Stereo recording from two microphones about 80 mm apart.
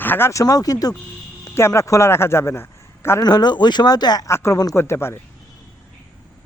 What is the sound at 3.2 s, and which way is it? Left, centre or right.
Speech, left.